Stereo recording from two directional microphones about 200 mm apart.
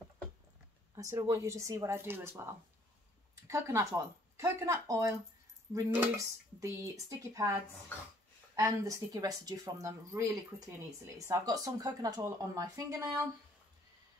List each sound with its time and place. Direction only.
0.9 s speech: 15° right (ahead or behind)
3.4 s speech: 15° right (ahead or behind)
8.5 s speech: 15° right (ahead or behind)